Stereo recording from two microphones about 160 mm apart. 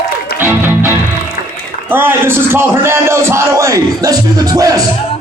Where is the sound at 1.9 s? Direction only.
15° right (ahead or behind).